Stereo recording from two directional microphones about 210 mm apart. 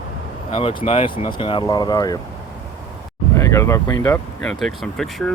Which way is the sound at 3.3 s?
15° left (ahead or behind).